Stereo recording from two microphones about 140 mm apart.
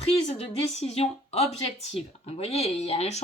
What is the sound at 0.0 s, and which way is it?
Speech, 50° left (ahead or behind).